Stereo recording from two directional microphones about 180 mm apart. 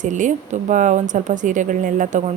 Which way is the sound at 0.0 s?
45° right (ahead or behind).